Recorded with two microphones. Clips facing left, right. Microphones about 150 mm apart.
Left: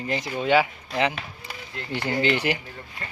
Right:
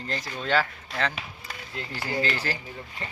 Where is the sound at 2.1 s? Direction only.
20° left (ahead or behind).